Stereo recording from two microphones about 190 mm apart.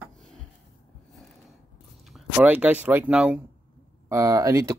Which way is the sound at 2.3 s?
10° right (ahead or behind).